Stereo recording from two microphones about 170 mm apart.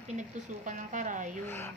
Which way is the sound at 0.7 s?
50° right (ahead or behind).